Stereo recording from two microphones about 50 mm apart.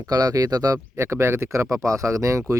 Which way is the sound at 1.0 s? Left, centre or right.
Right.